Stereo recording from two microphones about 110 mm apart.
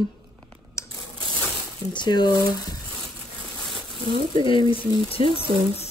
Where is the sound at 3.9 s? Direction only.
50° right (ahead or behind).